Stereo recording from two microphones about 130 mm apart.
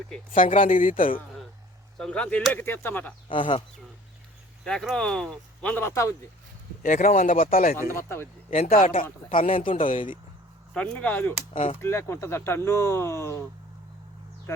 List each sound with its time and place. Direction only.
0.3 s speech: 90° left
2.0 s speech: 10° left (ahead or behind)
3.2 s speech: 40° left (ahead or behind)
4.6 s speech: 5° left (ahead or behind); by 6.1 s 20° left (ahead or behind)
6.8 s speech: 80° left
7.9 s speech: 20° left (ahead or behind)
8.4 s speech: 50° left (ahead or behind)
8.7 s speech: 90° left
9.3 s speech: 45° left (ahead or behind)
9.7 s speech: 85° left
10.8 s speech: 10° left (ahead or behind)
11.5 s speech: 60° left (ahead or behind)
11.8 s speech: 20° left (ahead or behind)